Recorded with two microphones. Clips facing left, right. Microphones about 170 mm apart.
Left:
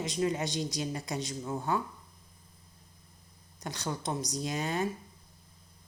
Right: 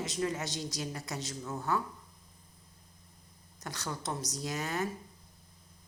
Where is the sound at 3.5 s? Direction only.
20° left (ahead or behind).